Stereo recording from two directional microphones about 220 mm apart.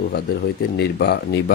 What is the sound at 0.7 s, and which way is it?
Speech, 45° left (ahead or behind).